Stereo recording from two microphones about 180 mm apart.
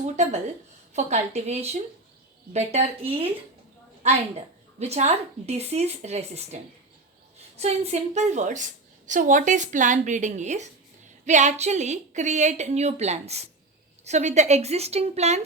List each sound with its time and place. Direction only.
0.9 s a woman's voice: 40° right (ahead or behind)